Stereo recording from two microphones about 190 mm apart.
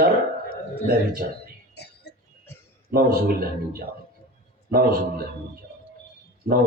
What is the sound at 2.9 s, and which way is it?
A man's voice, 50° right (ahead or behind).